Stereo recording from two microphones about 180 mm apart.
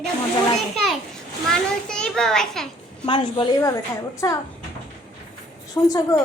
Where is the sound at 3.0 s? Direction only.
25° left (ahead or behind).